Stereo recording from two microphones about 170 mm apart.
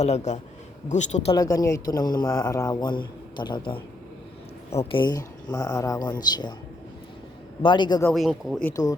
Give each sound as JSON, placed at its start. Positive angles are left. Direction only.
{"t": 0.0, "sound": "a man's voice", "side_deg": 40}
{"t": 1.4, "sound": "a man's voice", "side_deg": 20}
{"t": 7.6, "sound": "a man's voice", "side_deg": 25}
{"t": 8.1, "sound": "speech", "side_deg": 0}
{"t": 8.7, "sound": "a man's voice", "side_deg": 20}